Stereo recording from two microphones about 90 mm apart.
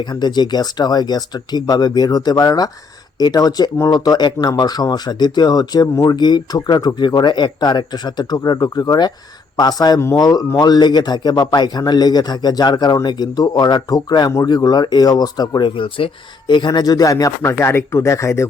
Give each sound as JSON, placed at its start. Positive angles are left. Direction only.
{"t": 0.0, "sound": "speech", "side_deg": 55}
{"t": 15.7, "sound": "speech", "side_deg": 75}
{"t": 17.4, "sound": "speech", "side_deg": 30}